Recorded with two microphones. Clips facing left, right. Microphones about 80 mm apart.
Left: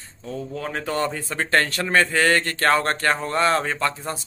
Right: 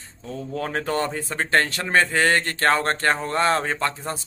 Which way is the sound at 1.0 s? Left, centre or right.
Right.